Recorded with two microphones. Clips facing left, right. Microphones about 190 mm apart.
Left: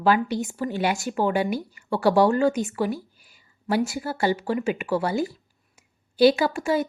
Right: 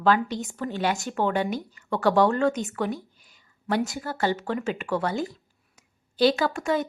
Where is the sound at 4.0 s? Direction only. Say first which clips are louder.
Left 2 dB; 10° left (ahead or behind).